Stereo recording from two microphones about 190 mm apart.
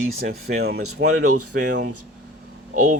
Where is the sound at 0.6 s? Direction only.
60° right (ahead or behind).